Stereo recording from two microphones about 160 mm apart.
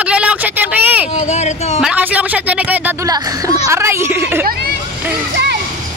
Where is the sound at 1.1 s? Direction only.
45° left (ahead or behind).